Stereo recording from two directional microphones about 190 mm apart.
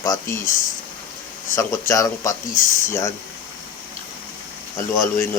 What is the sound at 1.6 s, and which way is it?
A man's voice, 15° left (ahead or behind).